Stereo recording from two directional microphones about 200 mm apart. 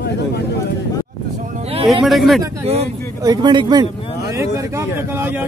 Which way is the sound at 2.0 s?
Centre (ahead or behind).